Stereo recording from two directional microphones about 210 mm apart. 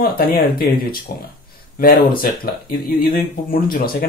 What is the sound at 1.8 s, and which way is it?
Speech, 45° left (ahead or behind).